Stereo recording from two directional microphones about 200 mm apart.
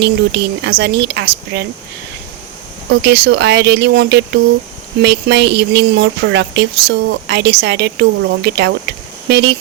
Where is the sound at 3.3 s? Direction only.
60° right (ahead or behind).